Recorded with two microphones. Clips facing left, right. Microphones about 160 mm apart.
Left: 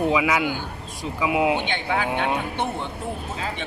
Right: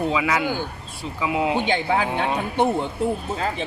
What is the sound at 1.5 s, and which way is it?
Speech, 35° right (ahead or behind).